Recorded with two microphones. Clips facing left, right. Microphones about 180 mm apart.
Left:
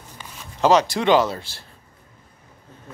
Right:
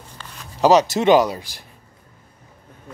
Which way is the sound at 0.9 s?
20° right (ahead or behind).